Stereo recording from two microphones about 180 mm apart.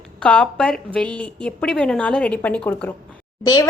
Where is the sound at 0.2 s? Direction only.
5° left (ahead or behind).